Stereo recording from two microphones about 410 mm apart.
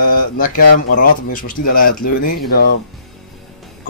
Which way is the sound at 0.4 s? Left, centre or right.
Centre.